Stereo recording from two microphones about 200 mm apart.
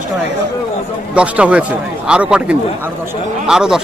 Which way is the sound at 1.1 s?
5° right (ahead or behind).